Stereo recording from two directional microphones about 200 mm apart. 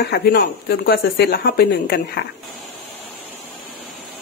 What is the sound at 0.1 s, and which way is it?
Speech, 50° left (ahead or behind).